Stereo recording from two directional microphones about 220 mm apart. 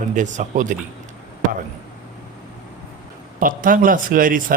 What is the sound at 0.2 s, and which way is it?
Speech, 35° right (ahead or behind).